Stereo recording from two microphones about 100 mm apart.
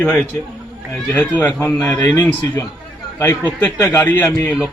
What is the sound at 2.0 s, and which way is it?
Speech, 35° left (ahead or behind).